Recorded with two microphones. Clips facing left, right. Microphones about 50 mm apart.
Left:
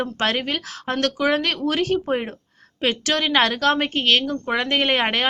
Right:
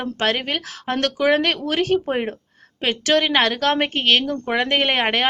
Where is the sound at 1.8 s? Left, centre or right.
Centre.